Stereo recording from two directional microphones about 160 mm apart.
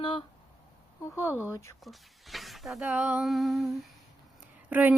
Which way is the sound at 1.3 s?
10° right (ahead or behind).